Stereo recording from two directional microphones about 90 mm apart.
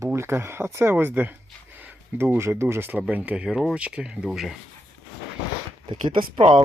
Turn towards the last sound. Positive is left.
turn(degrees=-65)  # may be behind; listen again after turning